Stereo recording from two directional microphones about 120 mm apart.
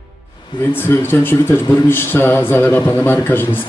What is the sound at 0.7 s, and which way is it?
Speech, 15° left (ahead or behind).